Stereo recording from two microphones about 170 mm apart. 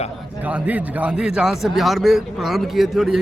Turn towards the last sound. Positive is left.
turn(degrees=0)  # may be behind; listen again after turning